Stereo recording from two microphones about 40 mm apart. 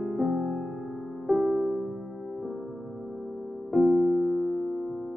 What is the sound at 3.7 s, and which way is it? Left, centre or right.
Music, centre.